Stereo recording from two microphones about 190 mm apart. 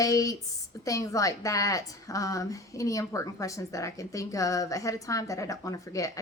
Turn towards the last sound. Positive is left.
turn(degrees=15)  # may be behind; listen again after turning